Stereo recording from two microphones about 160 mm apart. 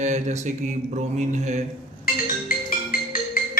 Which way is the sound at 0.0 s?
45° right (ahead or behind).